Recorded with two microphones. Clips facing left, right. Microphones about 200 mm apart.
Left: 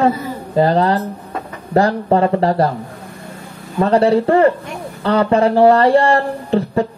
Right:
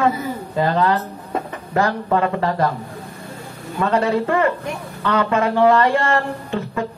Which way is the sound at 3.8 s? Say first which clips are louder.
Left 6 dB; 35° left (ahead or behind).